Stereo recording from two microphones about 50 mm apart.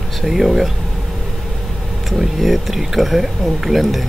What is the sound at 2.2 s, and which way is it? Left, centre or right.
Speech, centre.